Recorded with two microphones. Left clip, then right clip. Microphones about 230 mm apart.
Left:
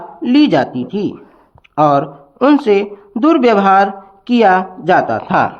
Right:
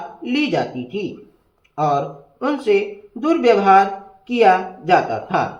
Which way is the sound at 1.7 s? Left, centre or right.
Left.